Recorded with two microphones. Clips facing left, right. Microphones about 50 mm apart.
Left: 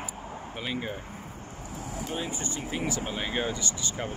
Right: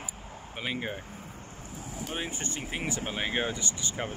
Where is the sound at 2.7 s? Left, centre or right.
Right.